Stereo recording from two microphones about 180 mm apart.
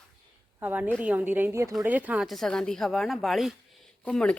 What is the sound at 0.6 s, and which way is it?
A woman's voice, 10° right (ahead or behind).